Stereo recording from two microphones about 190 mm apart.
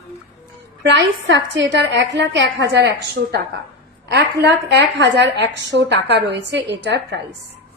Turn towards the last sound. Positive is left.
turn(degrees=-65)  # may be behind; listen again after turning